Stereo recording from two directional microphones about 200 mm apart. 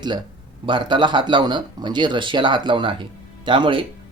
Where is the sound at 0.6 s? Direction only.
25° right (ahead or behind).